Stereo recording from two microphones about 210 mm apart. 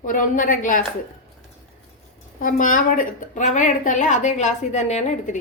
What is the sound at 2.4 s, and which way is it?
A woman's voice, 40° left (ahead or behind).